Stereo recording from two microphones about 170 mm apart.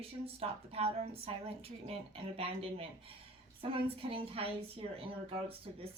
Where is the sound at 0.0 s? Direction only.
35° right (ahead or behind).